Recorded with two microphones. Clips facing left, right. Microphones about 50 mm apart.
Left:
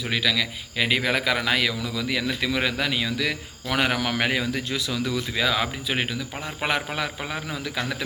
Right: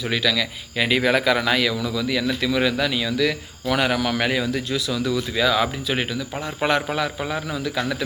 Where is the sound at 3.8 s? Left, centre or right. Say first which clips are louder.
Right 1 dB; left.